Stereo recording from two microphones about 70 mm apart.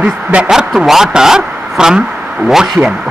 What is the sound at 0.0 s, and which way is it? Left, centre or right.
Speech, centre.